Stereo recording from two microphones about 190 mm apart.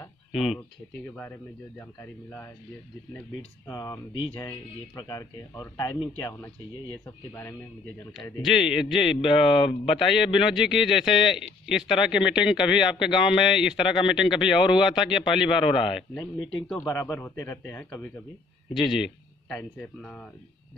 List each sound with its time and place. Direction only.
0.3 s speech: centre (ahead or behind)
3.6 s speech: 20° left (ahead or behind)
8.2 s speech: centre (ahead or behind)
9.5 s speech: 30° left (ahead or behind)
10.0 s speech: centre (ahead or behind)
15.7 s speech: 30° left (ahead or behind)
16.8 s speech: 15° left (ahead or behind)
18.7 s speech: centre (ahead or behind)